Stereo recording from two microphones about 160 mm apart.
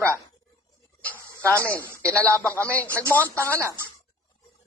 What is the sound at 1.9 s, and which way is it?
Speech, 10° left (ahead or behind).